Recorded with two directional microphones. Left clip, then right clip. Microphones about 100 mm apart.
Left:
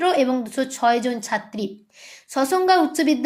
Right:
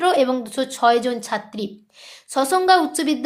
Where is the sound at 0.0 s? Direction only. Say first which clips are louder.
Right 2 dB; 20° right (ahead or behind).